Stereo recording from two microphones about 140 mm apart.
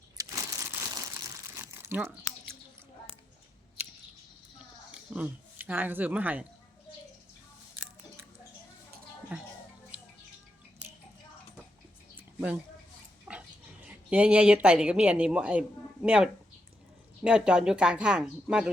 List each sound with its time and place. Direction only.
0.2 s crumpling: 20° right (ahead or behind)
4.9 s speech: 10° right (ahead or behind)
9.3 s music: 10° right (ahead or behind)
12.1 s a sound: 10° right (ahead or behind)
13.3 s pig: 5° right (ahead or behind)
13.8 s speech: 10° right (ahead or behind)